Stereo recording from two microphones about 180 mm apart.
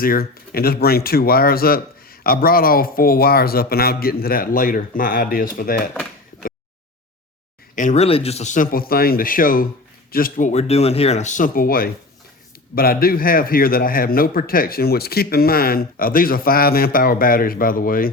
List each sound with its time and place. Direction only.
0.0 s speech: 55° left (ahead or behind)
7.8 s speech: 40° left (ahead or behind)